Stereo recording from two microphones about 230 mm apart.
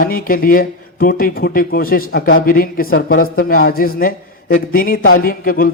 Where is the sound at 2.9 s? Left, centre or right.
Left.